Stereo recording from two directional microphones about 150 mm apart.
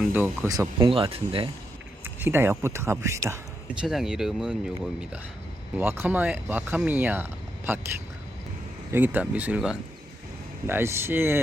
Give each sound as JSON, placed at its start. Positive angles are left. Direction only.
{"t": 0.1, "sound": "speech", "side_deg": -15}
{"t": 0.9, "sound": "speech", "side_deg": -35}
{"t": 2.0, "sound": "speech", "side_deg": -15}
{"t": 3.8, "sound": "speech", "side_deg": 0}
{"t": 8.9, "sound": "speech", "side_deg": -10}